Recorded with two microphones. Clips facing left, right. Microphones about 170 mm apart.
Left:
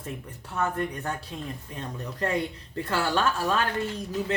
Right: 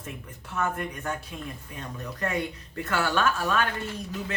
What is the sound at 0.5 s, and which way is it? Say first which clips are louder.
A man's voice: left 2 dB; 30° left (ahead or behind).